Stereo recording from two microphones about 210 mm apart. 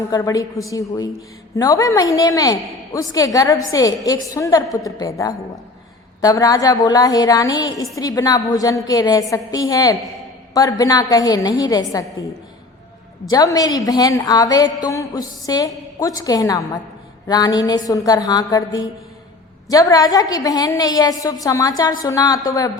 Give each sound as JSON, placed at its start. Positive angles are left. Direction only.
{"t": 0.1, "sound": "a woman's voice", "side_deg": 15}
{"t": 13.3, "sound": "a woman's voice", "side_deg": 15}